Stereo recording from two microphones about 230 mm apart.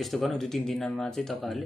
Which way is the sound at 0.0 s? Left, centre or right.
Centre.